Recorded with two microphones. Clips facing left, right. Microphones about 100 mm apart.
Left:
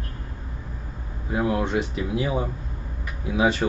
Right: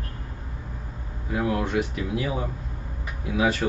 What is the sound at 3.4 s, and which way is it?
Speech, 25° left (ahead or behind).